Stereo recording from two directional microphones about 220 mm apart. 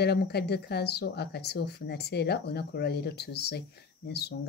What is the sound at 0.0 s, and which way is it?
Speech, 45° left (ahead or behind).